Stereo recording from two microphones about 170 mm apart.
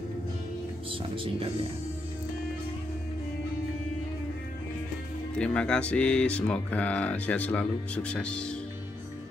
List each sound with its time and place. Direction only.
0.8 s speech: 30° right (ahead or behind)
5.4 s speech: 5° left (ahead or behind)